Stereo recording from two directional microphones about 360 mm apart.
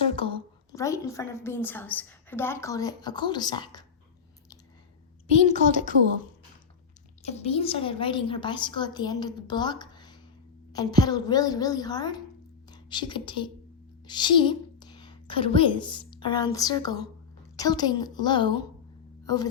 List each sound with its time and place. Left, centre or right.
0.0 s a woman's voice: centre
5.3 s a woman's voice: centre
7.2 s a woman's voice: centre